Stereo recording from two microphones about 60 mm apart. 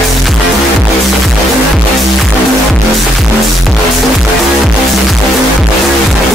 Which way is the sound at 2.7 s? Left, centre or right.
Centre.